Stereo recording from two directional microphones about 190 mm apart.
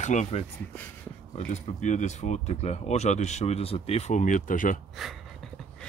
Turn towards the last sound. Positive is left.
turn(degrees=0)  # may be behind; listen again after turning